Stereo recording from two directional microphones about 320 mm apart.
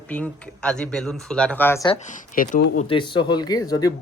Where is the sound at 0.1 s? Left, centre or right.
Centre.